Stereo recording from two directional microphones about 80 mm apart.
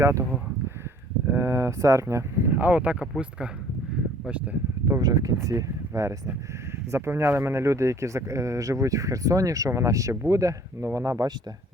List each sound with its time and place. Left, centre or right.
0.0 s speech: right
1.3 s speech: right
2.5 s speech: right
4.9 s speech: right